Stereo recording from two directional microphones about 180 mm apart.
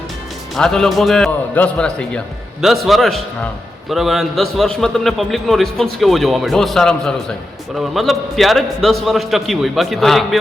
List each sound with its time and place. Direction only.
0.5 s a man's voice: 5° left (ahead or behind)